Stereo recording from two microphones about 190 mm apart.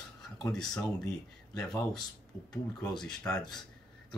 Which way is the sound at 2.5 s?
5° left (ahead or behind).